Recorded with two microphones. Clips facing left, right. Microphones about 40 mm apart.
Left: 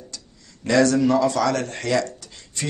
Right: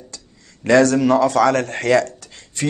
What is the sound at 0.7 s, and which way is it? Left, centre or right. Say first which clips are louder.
Speech: right 4 dB; right.